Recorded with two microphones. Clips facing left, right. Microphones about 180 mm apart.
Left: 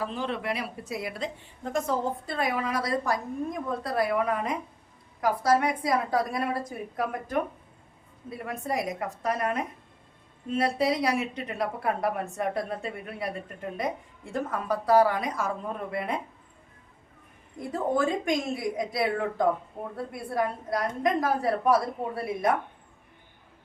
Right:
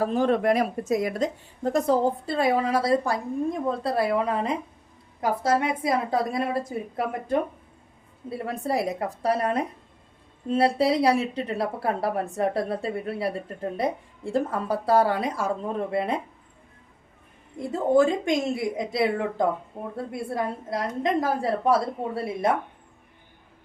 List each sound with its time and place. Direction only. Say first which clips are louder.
0.0 s a woman's voice: right 9 dB; 45° right (ahead or behind); by 16.2 s 30° right (ahead or behind)
17.6 s a woman's voice: right 6 dB; 25° right (ahead or behind)
20.1 s a woman's voice: even; 25° right (ahead or behind)